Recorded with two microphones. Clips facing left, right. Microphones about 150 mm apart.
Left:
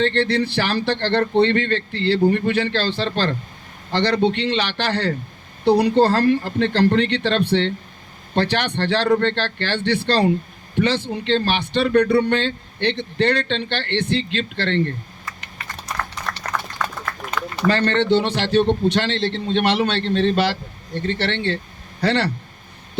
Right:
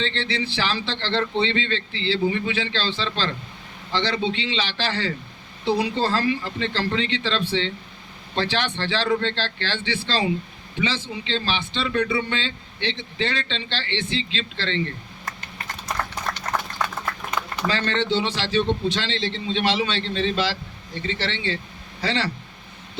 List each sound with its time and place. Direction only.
0.0 s speech: 60° left (ahead or behind)
16.4 s a sound: 60° left (ahead or behind)
17.6 s speech: 60° left (ahead or behind)